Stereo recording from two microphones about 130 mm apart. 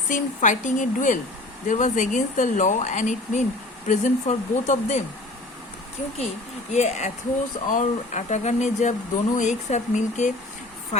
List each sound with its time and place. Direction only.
0.1 s a woman's voice: 75° left (ahead or behind)
6.7 s speech: 65° left (ahead or behind)
7.7 s speech: 80° left